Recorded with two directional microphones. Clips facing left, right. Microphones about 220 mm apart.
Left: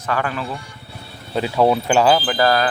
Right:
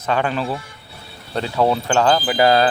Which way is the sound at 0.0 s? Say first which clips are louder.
Right 3 dB; 25° right (ahead or behind).